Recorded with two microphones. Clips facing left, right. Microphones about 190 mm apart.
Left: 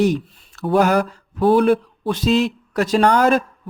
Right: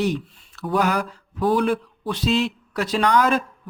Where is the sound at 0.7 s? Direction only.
45° left (ahead or behind).